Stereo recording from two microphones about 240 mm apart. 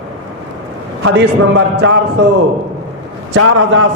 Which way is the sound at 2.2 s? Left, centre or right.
Right.